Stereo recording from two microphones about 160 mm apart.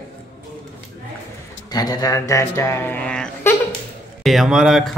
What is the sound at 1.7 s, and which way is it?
Speech, 25° left (ahead or behind).